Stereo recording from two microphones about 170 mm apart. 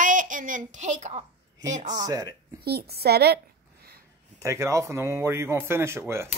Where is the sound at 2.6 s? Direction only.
65° right (ahead or behind).